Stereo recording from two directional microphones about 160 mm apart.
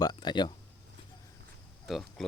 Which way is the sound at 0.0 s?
25° left (ahead or behind).